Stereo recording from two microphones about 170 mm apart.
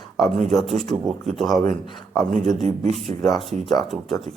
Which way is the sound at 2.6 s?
40° right (ahead or behind).